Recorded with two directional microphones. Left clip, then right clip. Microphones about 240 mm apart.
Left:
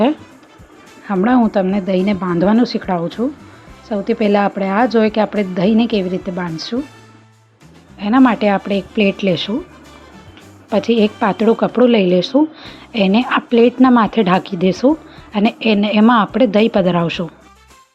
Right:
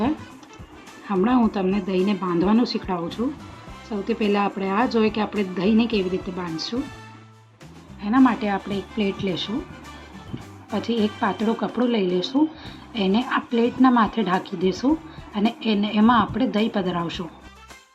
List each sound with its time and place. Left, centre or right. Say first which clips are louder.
1.0 s a woman's voice: left 6 dB; left
7.9 s speech: left 6 dB; left
10.7 s speech: left 10 dB; left